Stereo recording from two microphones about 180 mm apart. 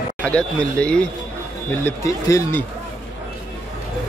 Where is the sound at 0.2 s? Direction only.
5° left (ahead or behind).